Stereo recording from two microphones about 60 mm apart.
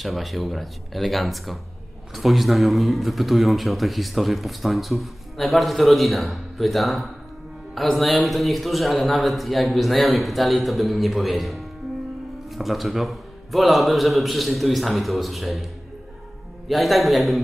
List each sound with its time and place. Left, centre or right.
0.0 s a man's voice: centre
16.6 s a man's voice: centre